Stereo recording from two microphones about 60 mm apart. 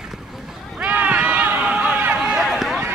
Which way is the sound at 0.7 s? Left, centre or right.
Right.